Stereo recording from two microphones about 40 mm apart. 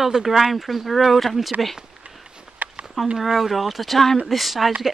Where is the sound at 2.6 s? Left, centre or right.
Right.